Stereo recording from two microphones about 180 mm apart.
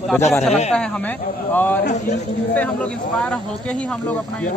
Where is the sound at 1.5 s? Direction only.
10° left (ahead or behind).